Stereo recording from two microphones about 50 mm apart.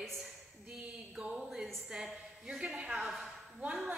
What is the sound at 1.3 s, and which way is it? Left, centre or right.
A woman's voice, centre.